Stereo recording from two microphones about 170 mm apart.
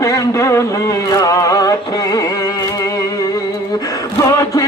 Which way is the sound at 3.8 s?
20° left (ahead or behind).